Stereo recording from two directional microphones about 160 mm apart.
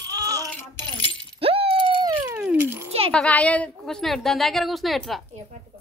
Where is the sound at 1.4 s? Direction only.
35° right (ahead or behind).